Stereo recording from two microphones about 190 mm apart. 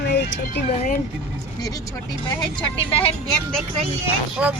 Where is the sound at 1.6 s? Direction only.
20° left (ahead or behind).